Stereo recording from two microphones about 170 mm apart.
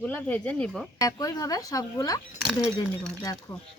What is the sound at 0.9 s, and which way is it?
Speech, 20° left (ahead or behind).